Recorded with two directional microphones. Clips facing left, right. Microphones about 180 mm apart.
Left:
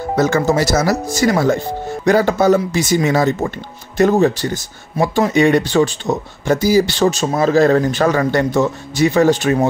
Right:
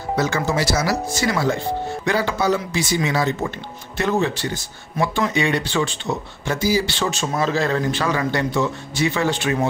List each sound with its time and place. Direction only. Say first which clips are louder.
0.1 s speech: left 6 dB; 45° left (ahead or behind)